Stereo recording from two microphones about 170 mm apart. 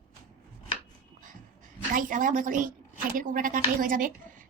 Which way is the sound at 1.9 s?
50° right (ahead or behind).